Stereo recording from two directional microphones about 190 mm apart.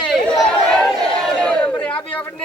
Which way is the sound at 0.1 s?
Centre (ahead or behind).